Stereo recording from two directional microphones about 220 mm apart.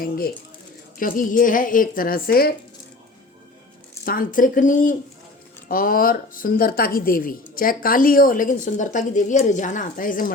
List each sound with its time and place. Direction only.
0.0 s a woman's voice: 40° left (ahead or behind)
4.0 s a woman's voice: 40° left (ahead or behind)